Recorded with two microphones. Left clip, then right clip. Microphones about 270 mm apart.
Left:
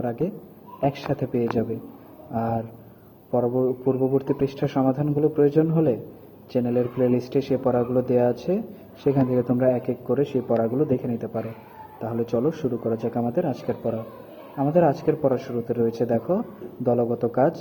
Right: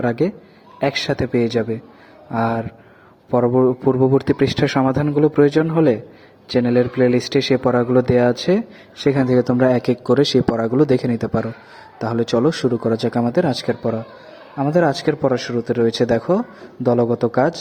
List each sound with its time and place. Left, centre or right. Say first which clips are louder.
0.8 s a man's voice: right 6 dB; right